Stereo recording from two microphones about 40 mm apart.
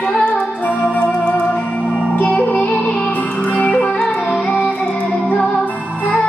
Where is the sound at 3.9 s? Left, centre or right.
Centre.